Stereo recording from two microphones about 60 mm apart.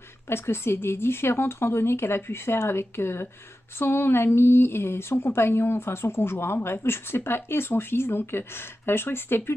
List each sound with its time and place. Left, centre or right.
0.3 s speech: left